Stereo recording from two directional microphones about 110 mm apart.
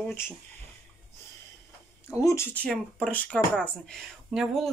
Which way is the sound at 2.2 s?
30° left (ahead or behind).